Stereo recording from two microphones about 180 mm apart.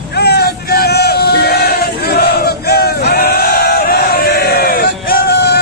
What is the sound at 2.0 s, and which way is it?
Battle cry, 60° left (ahead or behind).